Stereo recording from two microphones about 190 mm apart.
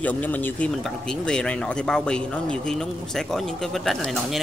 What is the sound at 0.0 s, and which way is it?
Speech, 10° left (ahead or behind).